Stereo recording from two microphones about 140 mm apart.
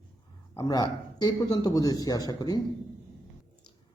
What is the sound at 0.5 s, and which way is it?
A man's voice, 25° left (ahead or behind).